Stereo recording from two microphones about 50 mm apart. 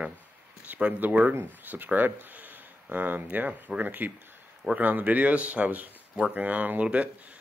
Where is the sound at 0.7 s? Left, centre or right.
Right.